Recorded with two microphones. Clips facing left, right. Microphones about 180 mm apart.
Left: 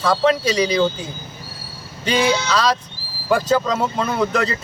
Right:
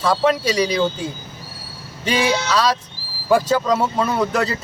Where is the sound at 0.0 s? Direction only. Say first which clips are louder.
Even; 10° right (ahead or behind).